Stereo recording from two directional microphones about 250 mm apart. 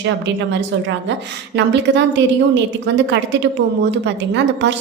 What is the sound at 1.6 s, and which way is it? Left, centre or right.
A woman's voice, right.